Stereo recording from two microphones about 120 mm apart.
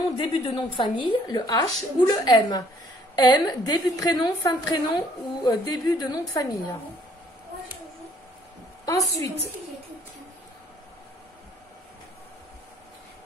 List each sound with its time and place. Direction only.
0.2 s a woman's voice: 50° left (ahead or behind); by 6.8 s 30° left (ahead or behind)
8.8 s a woman's voice: 30° left (ahead or behind)